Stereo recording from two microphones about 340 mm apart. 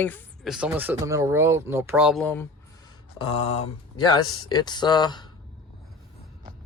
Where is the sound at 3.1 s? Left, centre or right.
Centre.